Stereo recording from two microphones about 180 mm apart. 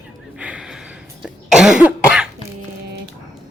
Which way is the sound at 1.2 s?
5° right (ahead or behind).